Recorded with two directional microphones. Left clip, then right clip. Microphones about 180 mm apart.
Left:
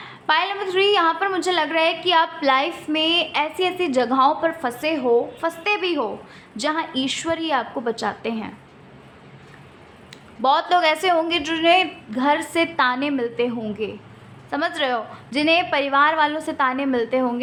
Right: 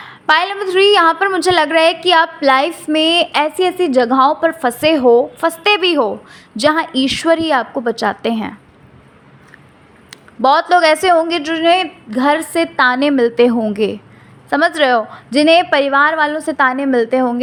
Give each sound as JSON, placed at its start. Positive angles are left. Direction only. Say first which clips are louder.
{"t": 0.0, "sound": "a woman's voice", "louder": "right 7 dB", "side_deg": -35}
{"t": 10.1, "sound": "a woman's voice", "louder": "right 7 dB", "side_deg": -30}
{"t": 14.5, "sound": "a woman's voice", "louder": "right 10 dB", "side_deg": -40}